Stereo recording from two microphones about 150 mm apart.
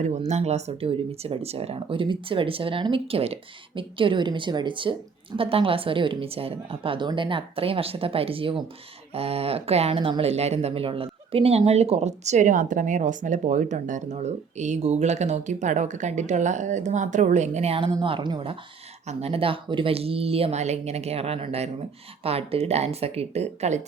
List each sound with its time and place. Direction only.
0.0 s speech: 50° right (ahead or behind)